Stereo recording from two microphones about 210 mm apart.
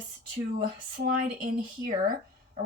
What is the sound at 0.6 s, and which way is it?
Speech, 40° right (ahead or behind).